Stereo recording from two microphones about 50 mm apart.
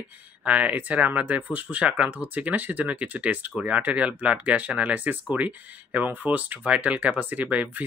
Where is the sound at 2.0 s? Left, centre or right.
Right.